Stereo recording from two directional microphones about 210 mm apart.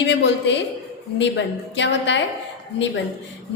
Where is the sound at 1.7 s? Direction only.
60° left (ahead or behind).